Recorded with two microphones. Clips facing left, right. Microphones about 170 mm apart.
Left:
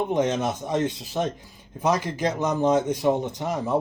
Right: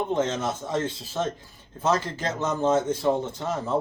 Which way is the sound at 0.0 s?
15° left (ahead or behind).